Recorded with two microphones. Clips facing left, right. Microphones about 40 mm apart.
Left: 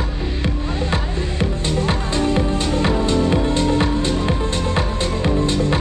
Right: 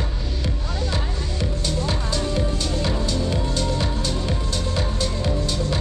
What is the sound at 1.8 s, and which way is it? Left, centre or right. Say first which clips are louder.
Music: left 7 dB; left.